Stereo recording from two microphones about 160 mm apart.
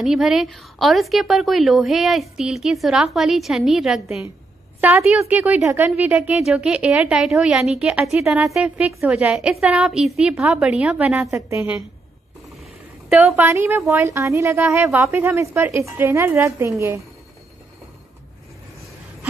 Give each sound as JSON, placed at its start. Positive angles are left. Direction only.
{"t": 0.0, "sound": "a woman's voice", "side_deg": 0}
{"t": 4.7, "sound": "a woman's voice", "side_deg": -10}
{"t": 13.1, "sound": "a woman's voice", "side_deg": -15}